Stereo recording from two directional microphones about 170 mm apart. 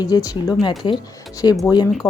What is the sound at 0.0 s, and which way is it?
Speech, 25° left (ahead or behind).